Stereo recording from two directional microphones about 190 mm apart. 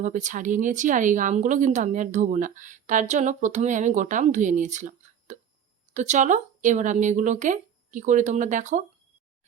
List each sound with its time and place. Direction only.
0.0 s speech: 40° right (ahead or behind)